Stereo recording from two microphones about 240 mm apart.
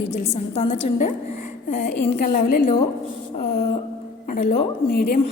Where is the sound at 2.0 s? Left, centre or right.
Left.